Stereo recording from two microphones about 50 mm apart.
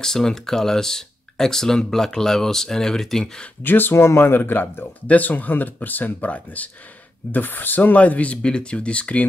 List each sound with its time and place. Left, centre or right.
0.0 s speech: centre
3.6 s speech: left
3.9 s speech: left
4.4 s speech: left